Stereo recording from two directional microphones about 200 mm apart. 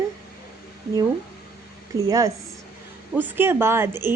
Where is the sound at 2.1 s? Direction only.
15° right (ahead or behind).